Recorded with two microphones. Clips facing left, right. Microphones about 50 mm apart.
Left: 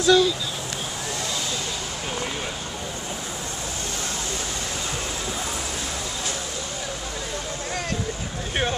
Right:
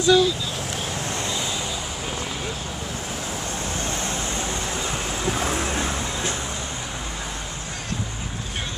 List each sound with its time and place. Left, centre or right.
0.0 s speech: centre
5.3 s vehicle: right